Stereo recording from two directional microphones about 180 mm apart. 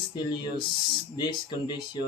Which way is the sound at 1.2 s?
25° left (ahead or behind).